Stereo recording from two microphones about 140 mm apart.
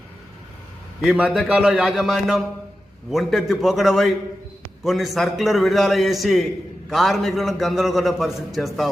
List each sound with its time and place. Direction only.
1.0 s a man's voice: 5° right (ahead or behind)